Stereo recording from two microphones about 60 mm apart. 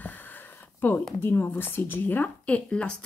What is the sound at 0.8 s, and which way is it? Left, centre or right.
Speech, left.